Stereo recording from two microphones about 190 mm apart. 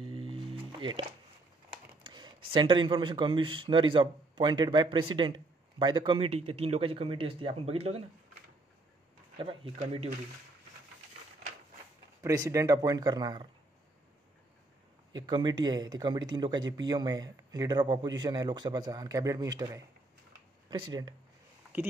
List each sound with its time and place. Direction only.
0.2 s music: 30° right (ahead or behind)
2.0 s speech: 25° right (ahead or behind)
9.4 s speech: 30° right (ahead or behind)
12.2 s speech: 15° right (ahead or behind)
15.1 s speech: 20° right (ahead or behind)